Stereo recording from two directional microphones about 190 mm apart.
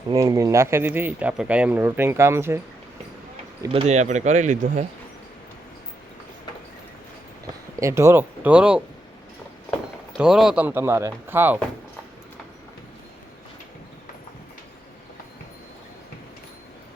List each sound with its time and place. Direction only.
0.1 s speech: 15° right (ahead or behind)
3.7 s speech: 35° right (ahead or behind)
7.8 s speech: 15° right (ahead or behind)
10.1 s speech: centre (ahead or behind)